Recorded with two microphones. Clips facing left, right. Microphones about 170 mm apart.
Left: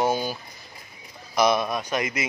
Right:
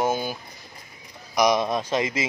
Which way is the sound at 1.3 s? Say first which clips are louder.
Right 1 dB; 15° right (ahead or behind).